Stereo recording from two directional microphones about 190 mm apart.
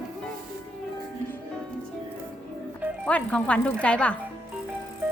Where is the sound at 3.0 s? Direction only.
5° left (ahead or behind).